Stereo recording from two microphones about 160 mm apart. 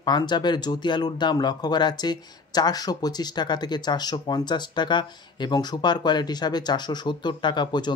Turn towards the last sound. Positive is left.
turn(degrees=30)  # may be behind; listen again after turning